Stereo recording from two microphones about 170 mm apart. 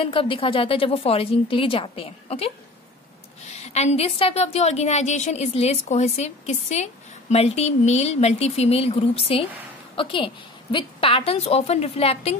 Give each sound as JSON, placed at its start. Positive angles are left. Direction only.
{"t": 0.0, "sound": "a woman's voice", "side_deg": 30}